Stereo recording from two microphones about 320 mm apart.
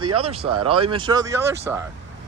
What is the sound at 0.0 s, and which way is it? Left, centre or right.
Speech, right.